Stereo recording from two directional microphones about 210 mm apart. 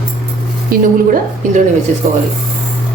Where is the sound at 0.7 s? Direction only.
45° right (ahead or behind).